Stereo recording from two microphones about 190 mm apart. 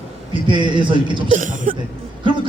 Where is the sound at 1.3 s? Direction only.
45° right (ahead or behind).